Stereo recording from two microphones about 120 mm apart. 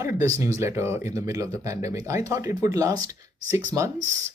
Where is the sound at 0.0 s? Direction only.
25° right (ahead or behind).